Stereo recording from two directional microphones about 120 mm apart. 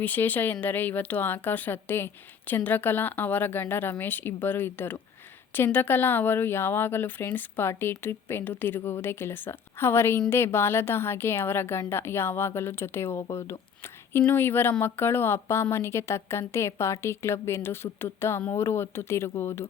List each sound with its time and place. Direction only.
0.0 s a woman's voice: 15° left (ahead or behind)